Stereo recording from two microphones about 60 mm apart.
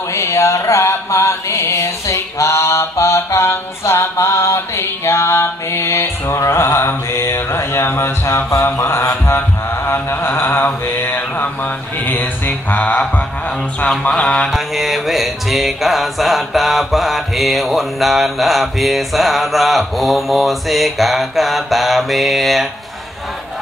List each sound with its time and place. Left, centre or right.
0.1 s mantra: left
13.8 s mantra: centre
14.5 s music: centre